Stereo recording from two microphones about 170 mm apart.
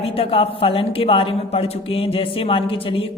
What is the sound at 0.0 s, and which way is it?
A woman's voice, 35° left (ahead or behind).